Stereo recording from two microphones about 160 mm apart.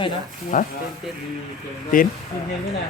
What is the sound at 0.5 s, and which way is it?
Speech, 60° left (ahead or behind).